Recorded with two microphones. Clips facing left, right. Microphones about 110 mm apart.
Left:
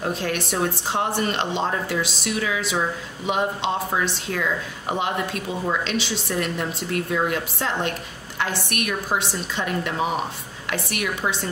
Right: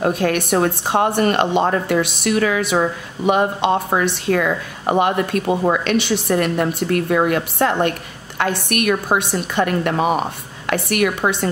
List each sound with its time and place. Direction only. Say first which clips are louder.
0.0 s speech: right 7 dB; 60° right (ahead or behind)